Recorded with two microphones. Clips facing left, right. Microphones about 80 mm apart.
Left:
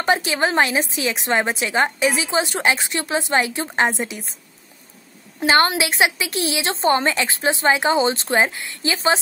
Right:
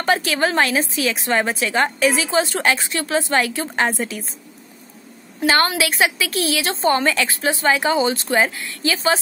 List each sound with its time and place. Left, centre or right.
0.0 s a woman's voice: left
5.4 s a woman's voice: left